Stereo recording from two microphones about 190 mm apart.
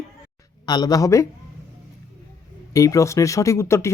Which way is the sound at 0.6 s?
20° left (ahead or behind).